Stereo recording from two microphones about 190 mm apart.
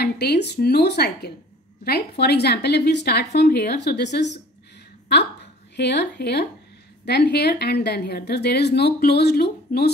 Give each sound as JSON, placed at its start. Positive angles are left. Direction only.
{"t": 0.0, "sound": "a woman's voice", "side_deg": 60}